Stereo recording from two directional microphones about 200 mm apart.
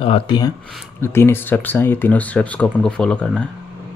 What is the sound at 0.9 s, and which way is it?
Speech, 10° left (ahead or behind).